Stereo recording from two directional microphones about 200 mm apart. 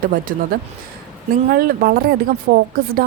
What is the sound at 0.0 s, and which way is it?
Speech, 45° right (ahead or behind).